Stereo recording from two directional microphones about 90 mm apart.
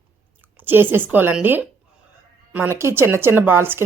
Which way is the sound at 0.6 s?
20° right (ahead or behind).